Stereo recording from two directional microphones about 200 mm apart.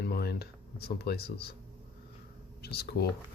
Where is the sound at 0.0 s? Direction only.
50° left (ahead or behind).